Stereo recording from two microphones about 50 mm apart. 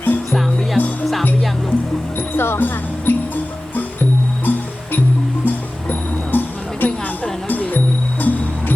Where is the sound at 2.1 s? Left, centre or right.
Left.